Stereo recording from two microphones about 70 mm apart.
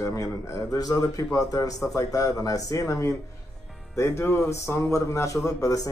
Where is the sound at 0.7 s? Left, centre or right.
Left.